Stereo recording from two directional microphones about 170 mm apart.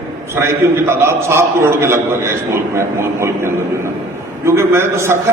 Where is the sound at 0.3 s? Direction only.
15° right (ahead or behind).